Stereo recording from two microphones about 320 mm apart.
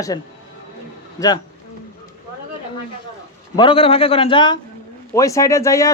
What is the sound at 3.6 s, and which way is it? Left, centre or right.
A man's voice, centre.